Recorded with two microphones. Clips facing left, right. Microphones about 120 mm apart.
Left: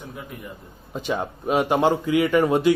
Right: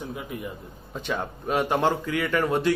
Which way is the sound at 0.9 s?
15° left (ahead or behind).